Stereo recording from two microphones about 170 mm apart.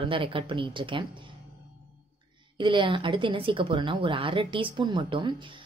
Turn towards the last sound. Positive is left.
turn(degrees=-30)  # may be behind; listen again after turning